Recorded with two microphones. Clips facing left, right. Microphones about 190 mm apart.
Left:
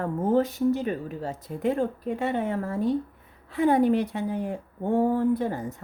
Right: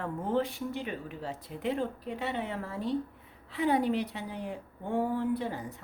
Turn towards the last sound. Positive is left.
turn(degrees=45)  # may be behind; listen again after turning